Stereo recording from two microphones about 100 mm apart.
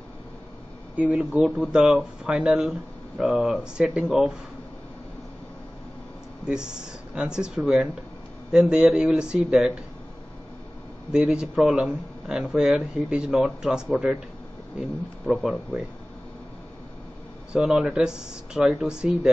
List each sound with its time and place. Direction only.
0.9 s speech: 15° right (ahead or behind)
6.4 s speech: 10° right (ahead or behind)
11.1 s speech: 5° right (ahead or behind)
17.5 s speech: 10° right (ahead or behind)